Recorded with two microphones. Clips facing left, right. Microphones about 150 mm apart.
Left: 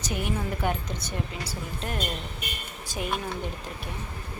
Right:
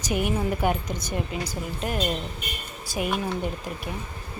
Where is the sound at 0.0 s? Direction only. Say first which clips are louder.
Right 5 dB; 15° right (ahead or behind).